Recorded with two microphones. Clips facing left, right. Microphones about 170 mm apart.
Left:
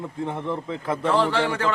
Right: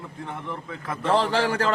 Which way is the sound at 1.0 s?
35° right (ahead or behind).